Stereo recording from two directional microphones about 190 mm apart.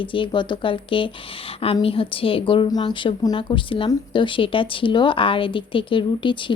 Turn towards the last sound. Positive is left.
turn(degrees=25)  # may be behind; listen again after turning